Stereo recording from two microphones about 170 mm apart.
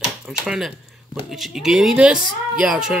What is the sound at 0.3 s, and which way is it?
Speech, 5° right (ahead or behind).